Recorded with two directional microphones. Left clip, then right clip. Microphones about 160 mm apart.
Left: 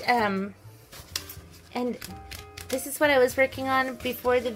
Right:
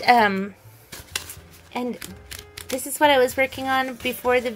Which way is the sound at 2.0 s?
30° right (ahead or behind).